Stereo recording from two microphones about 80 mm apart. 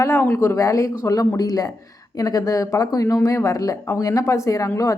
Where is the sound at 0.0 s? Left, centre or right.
Left.